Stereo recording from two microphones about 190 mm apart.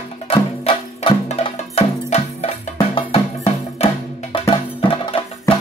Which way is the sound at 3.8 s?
35° left (ahead or behind).